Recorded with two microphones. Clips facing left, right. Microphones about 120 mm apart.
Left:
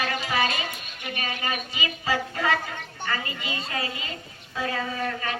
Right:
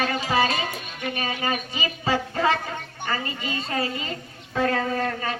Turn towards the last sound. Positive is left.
turn(degrees=-35)  # may be behind; listen again after turning